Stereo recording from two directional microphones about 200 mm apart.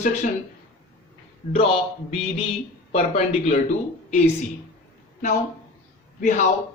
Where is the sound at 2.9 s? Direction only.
30° left (ahead or behind).